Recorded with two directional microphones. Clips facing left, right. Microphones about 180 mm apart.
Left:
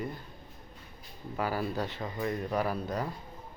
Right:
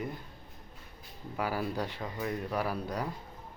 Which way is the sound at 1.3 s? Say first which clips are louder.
Left 1 dB; 10° right (ahead or behind).